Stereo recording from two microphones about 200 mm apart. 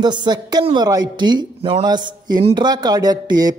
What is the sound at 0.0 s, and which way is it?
A woman's voice, 20° right (ahead or behind).